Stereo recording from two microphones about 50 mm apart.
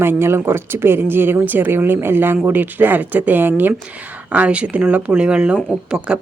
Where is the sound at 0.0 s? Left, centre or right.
Right.